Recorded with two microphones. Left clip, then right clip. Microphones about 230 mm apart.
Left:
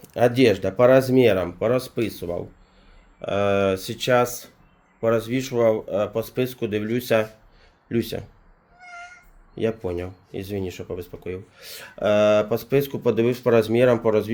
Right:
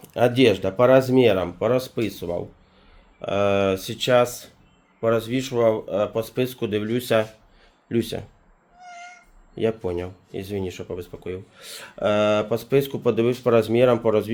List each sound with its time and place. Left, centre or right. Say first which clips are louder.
0.0 s speech: even; centre
9.6 s speech: right 1 dB; centre